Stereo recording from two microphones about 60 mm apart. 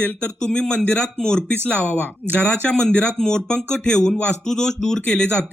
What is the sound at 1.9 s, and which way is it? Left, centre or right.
Speech, right.